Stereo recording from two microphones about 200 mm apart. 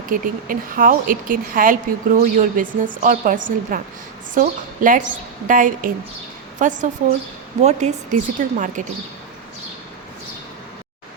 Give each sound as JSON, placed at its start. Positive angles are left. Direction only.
{"t": 0.1, "sound": "speech", "side_deg": -45}